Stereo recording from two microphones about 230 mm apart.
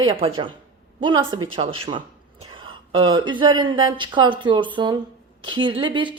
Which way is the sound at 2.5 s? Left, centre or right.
Right.